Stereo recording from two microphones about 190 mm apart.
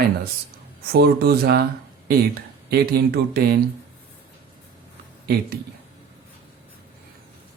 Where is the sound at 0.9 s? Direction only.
55° right (ahead or behind).